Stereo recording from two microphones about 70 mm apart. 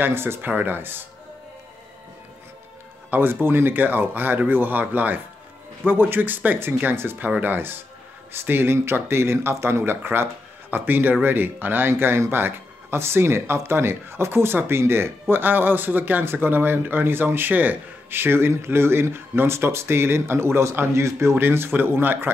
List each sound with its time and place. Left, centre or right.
0.0 s speech: right
3.1 s speech: right